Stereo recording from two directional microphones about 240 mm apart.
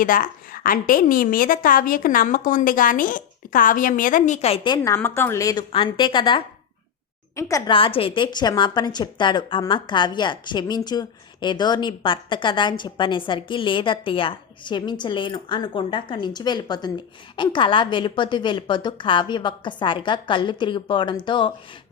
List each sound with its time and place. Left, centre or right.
0.0 s a woman's voice: left; by 21.5 s centre